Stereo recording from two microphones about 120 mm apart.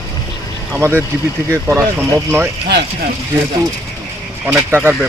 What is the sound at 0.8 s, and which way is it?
Speech, 20° right (ahead or behind).